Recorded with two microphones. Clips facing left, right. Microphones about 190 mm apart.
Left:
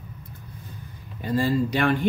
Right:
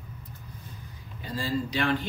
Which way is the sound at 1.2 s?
55° left (ahead or behind).